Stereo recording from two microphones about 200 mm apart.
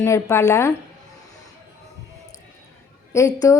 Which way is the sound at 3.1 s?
15° left (ahead or behind).